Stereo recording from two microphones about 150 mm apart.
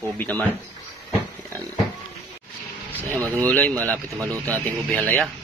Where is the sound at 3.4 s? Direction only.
10° left (ahead or behind).